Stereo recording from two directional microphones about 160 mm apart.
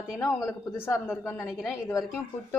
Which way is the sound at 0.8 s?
15° left (ahead or behind).